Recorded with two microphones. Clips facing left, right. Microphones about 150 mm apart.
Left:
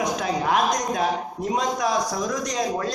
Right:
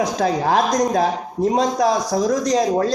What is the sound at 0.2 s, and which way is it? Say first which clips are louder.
Speech: right 6 dB; 35° right (ahead or behind).